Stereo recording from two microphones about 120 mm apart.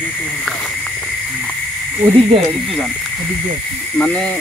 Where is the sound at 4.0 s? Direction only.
10° left (ahead or behind).